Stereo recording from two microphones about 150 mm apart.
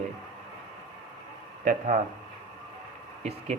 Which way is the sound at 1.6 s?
65° right (ahead or behind).